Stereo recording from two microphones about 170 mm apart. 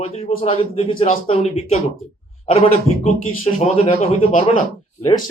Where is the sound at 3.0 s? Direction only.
45° left (ahead or behind).